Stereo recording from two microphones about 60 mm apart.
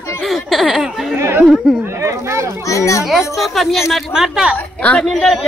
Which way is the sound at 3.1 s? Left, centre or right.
Centre.